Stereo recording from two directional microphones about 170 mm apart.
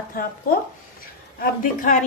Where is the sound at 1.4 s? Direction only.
55° left (ahead or behind).